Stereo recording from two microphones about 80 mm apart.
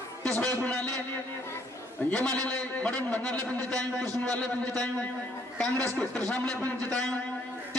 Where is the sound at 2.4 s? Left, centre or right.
Centre.